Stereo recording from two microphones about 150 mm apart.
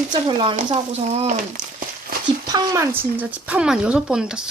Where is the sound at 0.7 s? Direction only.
45° right (ahead or behind).